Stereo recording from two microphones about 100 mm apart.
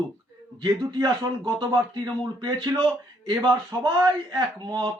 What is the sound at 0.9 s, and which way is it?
Speech, 40° right (ahead or behind).